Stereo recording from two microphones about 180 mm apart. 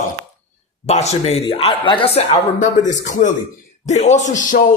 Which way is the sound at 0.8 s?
40° left (ahead or behind).